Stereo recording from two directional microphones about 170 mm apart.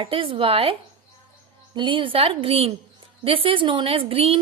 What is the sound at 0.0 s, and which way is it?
Speech, 30° right (ahead or behind).